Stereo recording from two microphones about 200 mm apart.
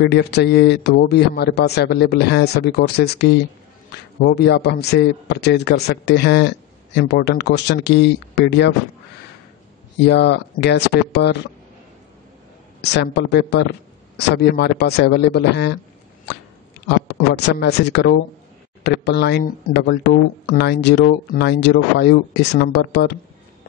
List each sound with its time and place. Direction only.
0.0 s speech: 55° left (ahead or behind)
10.0 s speech: 60° left (ahead or behind)
12.9 s speech: 55° left (ahead or behind)